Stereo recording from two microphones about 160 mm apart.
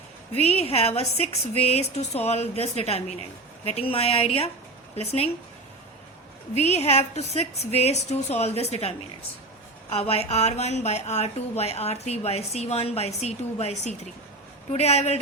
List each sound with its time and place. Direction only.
0.3 s a woman's voice: 40° left (ahead or behind)
6.6 s a woman's voice: 45° left (ahead or behind)